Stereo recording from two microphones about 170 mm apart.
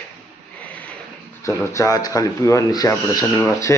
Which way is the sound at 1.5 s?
20° left (ahead or behind).